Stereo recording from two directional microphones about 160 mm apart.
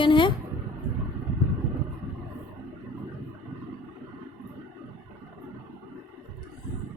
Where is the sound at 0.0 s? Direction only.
30° left (ahead or behind).